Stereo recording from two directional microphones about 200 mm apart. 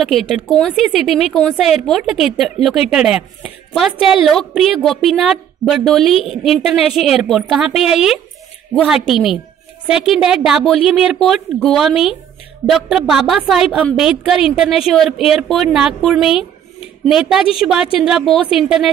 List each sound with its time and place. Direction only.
0.0 s a woman's voice: centre (ahead or behind)